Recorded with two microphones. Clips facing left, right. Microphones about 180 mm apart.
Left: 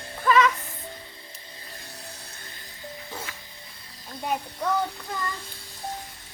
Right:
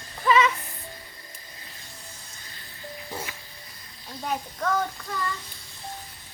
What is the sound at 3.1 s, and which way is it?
Music, 15° right (ahead or behind).